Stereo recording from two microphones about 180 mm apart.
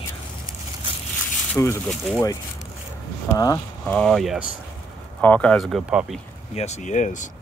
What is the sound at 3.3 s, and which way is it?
Speech, 20° left (ahead or behind).